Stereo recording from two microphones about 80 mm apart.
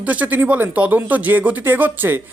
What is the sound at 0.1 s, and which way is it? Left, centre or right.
Speech, right.